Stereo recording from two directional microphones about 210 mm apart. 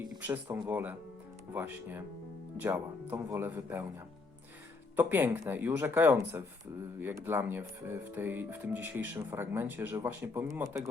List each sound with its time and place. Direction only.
0.2 s speech: 10° right (ahead or behind)
4.9 s speech: 10° right (ahead or behind)